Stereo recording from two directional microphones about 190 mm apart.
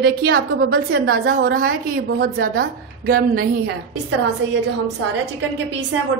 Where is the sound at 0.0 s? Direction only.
55° right (ahead or behind).